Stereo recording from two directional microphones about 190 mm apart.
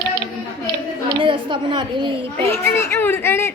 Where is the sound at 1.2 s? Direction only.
25° right (ahead or behind).